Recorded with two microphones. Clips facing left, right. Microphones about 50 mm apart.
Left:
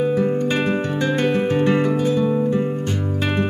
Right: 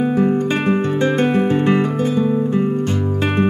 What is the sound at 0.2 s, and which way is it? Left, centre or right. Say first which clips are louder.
Guitar: right 3 dB; right.